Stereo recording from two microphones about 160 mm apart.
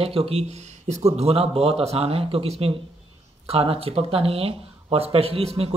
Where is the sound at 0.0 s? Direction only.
40° right (ahead or behind).